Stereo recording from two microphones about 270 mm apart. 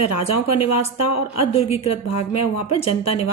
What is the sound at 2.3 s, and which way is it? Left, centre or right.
Speech, left.